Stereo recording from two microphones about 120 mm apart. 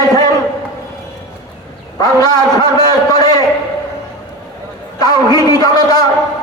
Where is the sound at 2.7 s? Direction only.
30° left (ahead or behind).